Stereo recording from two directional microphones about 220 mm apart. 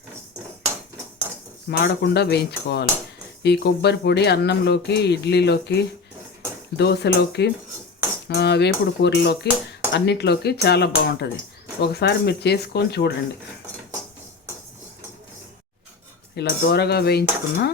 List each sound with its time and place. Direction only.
1.7 s speech: 50° left (ahead or behind)
6.7 s speech: 50° left (ahead or behind)
16.3 s speech: 50° left (ahead or behind)